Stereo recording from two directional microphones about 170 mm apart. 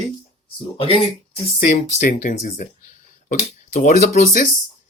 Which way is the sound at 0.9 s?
35° left (ahead or behind).